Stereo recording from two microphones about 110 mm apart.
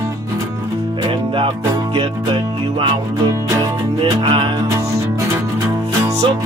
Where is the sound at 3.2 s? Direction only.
30° right (ahead or behind).